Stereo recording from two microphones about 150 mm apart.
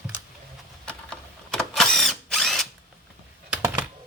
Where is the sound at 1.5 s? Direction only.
5° left (ahead or behind).